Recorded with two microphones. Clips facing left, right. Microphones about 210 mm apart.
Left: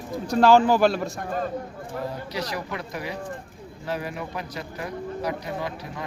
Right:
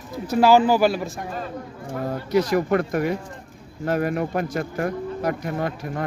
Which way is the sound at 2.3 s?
50° right (ahead or behind).